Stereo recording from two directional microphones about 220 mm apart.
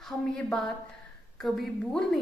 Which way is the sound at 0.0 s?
Centre (ahead or behind).